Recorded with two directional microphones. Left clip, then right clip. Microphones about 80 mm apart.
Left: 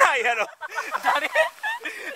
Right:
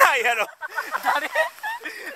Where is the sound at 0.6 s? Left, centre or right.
Centre.